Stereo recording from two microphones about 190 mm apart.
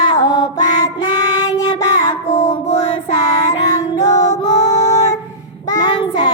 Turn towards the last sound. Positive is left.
turn(degrees=25)  # may be behind; listen again after turning